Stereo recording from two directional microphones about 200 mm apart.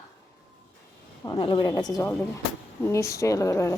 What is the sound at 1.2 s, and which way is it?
A woman's voice, 20° left (ahead or behind).